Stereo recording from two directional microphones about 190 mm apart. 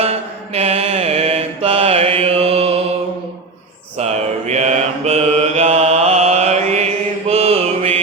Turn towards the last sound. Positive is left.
turn(degrees=-30)  # may be behind; listen again after turning